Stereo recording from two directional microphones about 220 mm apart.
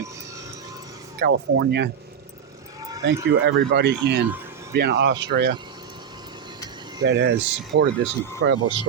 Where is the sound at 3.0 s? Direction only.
50° right (ahead or behind).